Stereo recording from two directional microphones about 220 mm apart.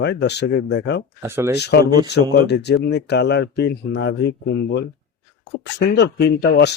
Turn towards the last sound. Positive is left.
turn(degrees=50)  # may be behind; listen again after turning